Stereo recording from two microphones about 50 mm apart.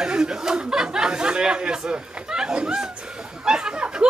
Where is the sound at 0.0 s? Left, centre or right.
Centre.